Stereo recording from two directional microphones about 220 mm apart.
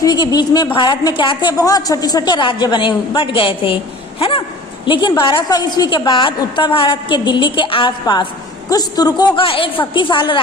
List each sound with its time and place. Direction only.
0.0 s a woman's voice: 20° left (ahead or behind)